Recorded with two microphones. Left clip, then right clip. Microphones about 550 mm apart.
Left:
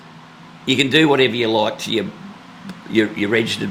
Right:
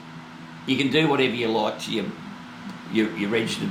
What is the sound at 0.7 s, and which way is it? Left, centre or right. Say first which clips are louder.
Speech: left 7 dB; left.